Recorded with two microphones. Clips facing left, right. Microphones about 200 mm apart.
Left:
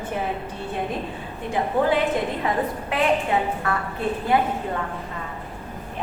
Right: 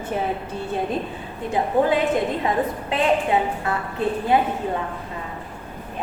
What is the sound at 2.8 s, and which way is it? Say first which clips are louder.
A woman's voice: right 1 dB; 25° right (ahead or behind).